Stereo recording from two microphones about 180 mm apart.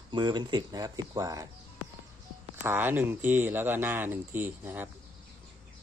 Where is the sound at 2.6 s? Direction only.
10° right (ahead or behind).